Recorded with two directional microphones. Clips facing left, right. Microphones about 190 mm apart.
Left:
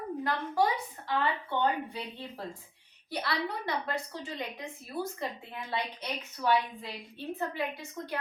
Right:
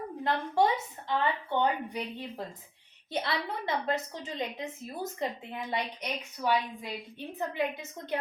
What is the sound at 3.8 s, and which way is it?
A woman's voice, 20° right (ahead or behind).